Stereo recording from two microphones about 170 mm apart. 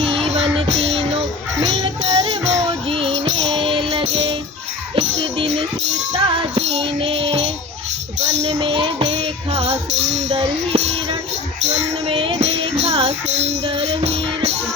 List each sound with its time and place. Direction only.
0.3 s music: 40° right (ahead or behind)
8.5 s music: 25° right (ahead or behind)